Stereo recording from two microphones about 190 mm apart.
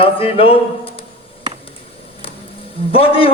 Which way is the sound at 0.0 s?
30° left (ahead or behind).